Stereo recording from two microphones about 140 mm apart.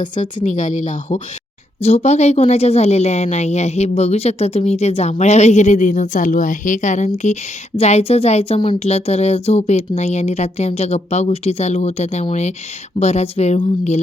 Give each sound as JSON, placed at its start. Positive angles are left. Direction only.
{"t": 0.2, "sound": "a woman's voice", "side_deg": 60}
{"t": 1.8, "sound": "speech", "side_deg": 50}